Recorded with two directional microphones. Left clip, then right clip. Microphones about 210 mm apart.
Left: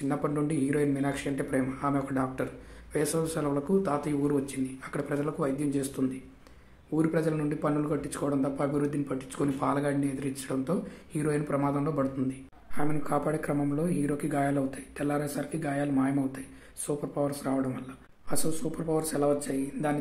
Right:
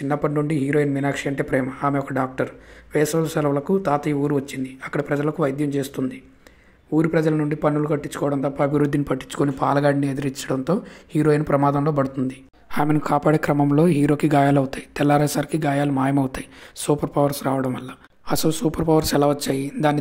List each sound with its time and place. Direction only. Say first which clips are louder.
0.1 s speech: right 9 dB; 30° right (ahead or behind); by 20.0 s 45° right (ahead or behind)